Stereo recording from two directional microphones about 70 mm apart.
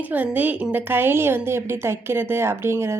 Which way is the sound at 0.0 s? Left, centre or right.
Right.